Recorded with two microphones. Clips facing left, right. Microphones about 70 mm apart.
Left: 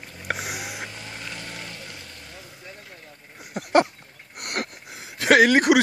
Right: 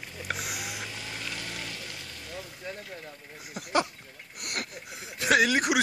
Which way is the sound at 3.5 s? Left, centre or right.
Left.